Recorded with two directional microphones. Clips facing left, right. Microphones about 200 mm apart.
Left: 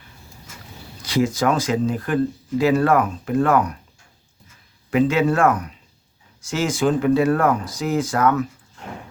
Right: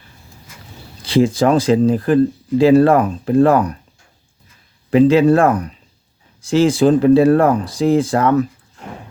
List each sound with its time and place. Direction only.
1.0 s speech: 30° right (ahead or behind)
4.9 s speech: 30° right (ahead or behind)